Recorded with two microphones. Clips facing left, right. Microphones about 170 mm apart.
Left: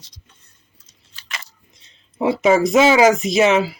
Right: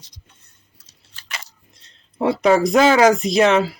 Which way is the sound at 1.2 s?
50° right (ahead or behind).